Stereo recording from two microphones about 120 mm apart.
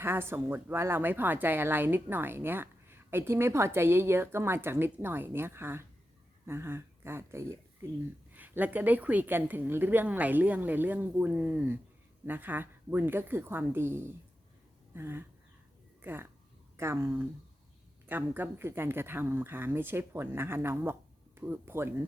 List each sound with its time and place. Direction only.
0.0 s a woman's voice: 20° right (ahead or behind)